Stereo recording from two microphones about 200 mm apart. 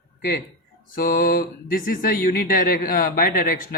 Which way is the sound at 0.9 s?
45° left (ahead or behind).